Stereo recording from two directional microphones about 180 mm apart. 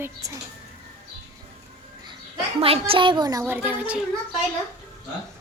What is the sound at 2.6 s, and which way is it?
A child's voice, 30° right (ahead or behind).